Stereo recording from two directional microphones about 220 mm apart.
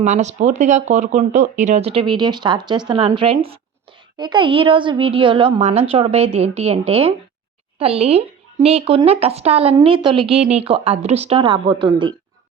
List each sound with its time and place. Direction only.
0.0 s speech: 30° right (ahead or behind)